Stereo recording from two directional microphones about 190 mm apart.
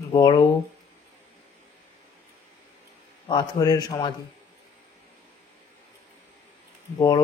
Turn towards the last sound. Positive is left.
turn(degrees=20)  # may be behind; listen again after turning